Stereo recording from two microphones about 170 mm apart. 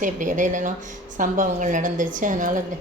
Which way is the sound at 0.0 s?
50° right (ahead or behind).